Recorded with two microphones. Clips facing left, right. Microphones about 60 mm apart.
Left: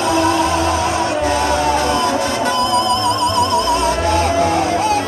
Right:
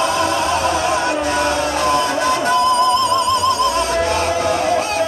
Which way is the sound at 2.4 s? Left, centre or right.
Left.